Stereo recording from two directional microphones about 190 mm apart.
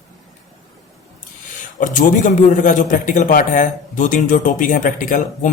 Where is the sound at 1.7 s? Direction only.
45° left (ahead or behind).